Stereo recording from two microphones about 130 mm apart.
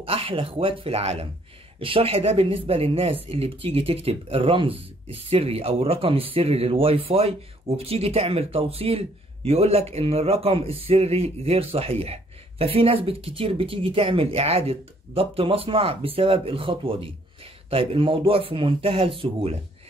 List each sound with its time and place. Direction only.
0.0 s speech: 45° right (ahead or behind)